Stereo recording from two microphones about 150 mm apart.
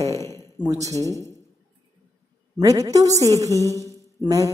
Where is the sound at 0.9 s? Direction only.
20° left (ahead or behind).